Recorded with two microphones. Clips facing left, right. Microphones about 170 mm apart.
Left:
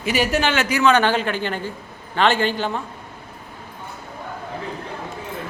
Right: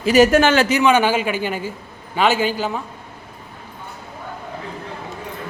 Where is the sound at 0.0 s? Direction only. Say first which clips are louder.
Right 7 dB; 40° right (ahead or behind).